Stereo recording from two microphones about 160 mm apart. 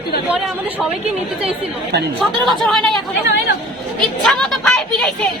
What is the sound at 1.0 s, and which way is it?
Speech, 40° right (ahead or behind).